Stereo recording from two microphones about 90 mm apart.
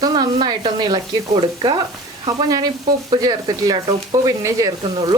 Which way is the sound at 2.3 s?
45° right (ahead or behind).